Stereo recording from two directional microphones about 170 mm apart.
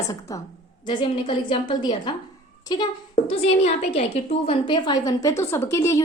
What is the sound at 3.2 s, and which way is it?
A woman's voice, 40° left (ahead or behind).